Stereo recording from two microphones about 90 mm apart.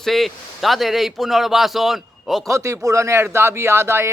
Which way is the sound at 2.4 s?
35° right (ahead or behind).